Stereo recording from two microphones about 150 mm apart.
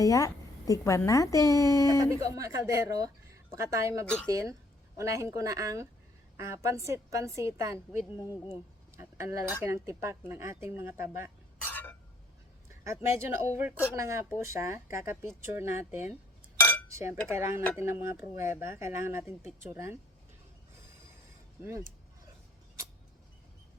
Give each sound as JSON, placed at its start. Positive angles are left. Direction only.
{"t": 0.0, "sound": "a woman's voice", "side_deg": 20}
{"t": 1.9, "sound": "speech", "side_deg": -25}
{"t": 8.2, "sound": "a woman's voice", "side_deg": 25}
{"t": 9.0, "sound": "speech", "side_deg": -20}
{"t": 11.6, "sound": "cough", "side_deg": 10}
{"t": 12.6, "sound": "a sound", "side_deg": -20}
{"t": 13.2, "sound": "speech", "side_deg": -15}